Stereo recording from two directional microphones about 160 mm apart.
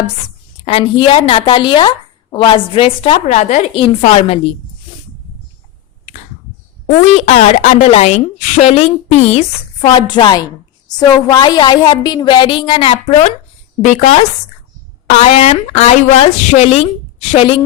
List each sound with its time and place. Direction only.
0.6 s a woman's voice: 40° left (ahead or behind)
3.8 s a woman's voice: 35° left (ahead or behind)
6.8 s a woman's voice: 45° left (ahead or behind)
13.8 s a woman's voice: 50° left (ahead or behind)